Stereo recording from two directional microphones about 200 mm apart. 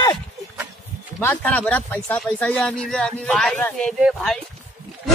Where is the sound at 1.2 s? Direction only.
10° left (ahead or behind).